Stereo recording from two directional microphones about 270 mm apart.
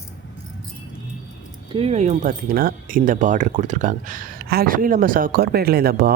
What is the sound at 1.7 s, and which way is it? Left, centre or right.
Speech, right.